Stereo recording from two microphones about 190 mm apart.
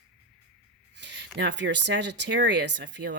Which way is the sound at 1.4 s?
70° right (ahead or behind).